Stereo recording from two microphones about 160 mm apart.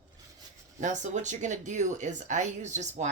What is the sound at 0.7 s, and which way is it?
Speech, 50° right (ahead or behind).